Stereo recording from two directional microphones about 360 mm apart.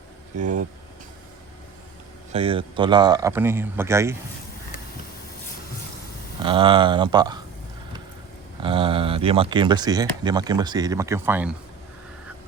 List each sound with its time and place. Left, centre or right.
0.3 s speech: right
2.3 s speech: centre
6.4 s speech: centre
8.6 s speech: centre